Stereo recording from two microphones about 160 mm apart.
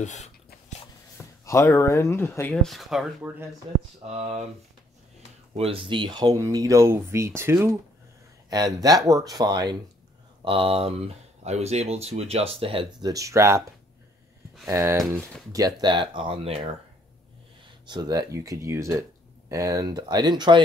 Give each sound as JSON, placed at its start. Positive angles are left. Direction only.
{"t": 0.0, "sound": "speech", "side_deg": 45}
{"t": 1.4, "sound": "speech", "side_deg": 20}
{"t": 4.1, "sound": "speech", "side_deg": -40}
{"t": 5.6, "sound": "speech", "side_deg": -35}
{"t": 13.1, "sound": "speech", "side_deg": -20}
{"t": 14.7, "sound": "speech", "side_deg": -15}
{"t": 17.8, "sound": "speech", "side_deg": -25}